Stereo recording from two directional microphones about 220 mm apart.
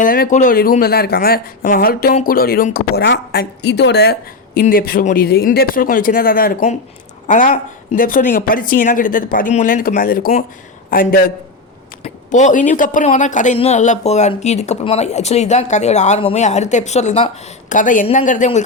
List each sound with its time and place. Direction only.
0.0 s speech: 40° left (ahead or behind)